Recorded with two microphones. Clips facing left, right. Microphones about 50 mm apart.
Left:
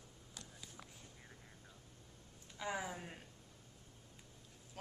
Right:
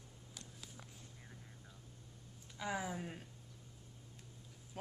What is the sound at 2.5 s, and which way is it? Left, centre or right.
Speech, centre.